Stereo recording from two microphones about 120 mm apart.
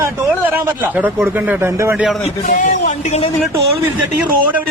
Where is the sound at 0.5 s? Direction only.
15° right (ahead or behind).